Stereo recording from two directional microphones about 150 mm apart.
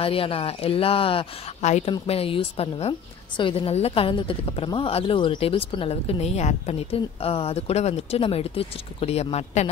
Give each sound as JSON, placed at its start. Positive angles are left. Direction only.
{"t": 0.0, "sound": "a woman's voice", "side_deg": 40}
{"t": 1.9, "sound": "a woman's voice", "side_deg": 40}